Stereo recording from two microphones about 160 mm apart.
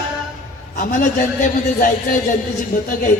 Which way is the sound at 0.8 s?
55° left (ahead or behind).